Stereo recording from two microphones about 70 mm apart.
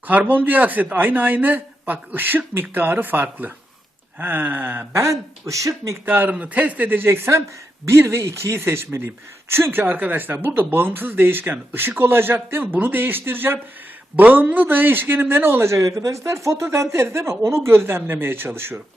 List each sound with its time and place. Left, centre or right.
0.1 s speech: right
4.9 s speech: right
6.1 s speech: right